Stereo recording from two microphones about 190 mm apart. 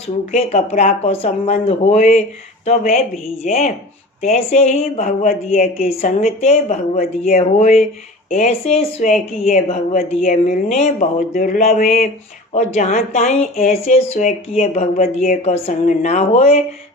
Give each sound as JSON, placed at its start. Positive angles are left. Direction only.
{"t": 0.3, "sound": "a woman's voice", "side_deg": 35}
{"t": 15.4, "sound": "a woman's voice", "side_deg": 35}